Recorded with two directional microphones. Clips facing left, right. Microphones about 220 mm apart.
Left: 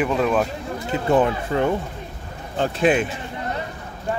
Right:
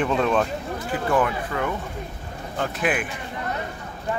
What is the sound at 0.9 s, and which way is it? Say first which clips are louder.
Speech: left 4 dB; 20° left (ahead or behind).